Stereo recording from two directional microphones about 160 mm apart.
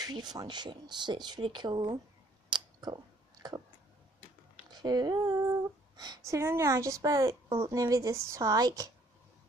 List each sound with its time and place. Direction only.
0.0 s speech: 25° right (ahead or behind)
2.5 s a sound: 25° right (ahead or behind)
4.6 s speech: 25° right (ahead or behind)